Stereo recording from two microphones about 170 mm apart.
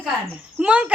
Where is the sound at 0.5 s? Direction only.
5° right (ahead or behind).